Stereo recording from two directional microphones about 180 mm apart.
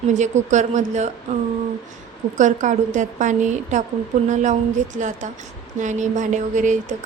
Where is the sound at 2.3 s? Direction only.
40° right (ahead or behind).